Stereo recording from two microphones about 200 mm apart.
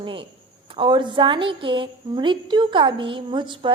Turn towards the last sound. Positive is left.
turn(degrees=-25)  # may be behind; listen again after turning